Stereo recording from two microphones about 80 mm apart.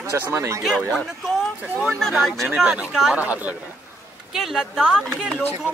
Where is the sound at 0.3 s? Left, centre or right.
Right.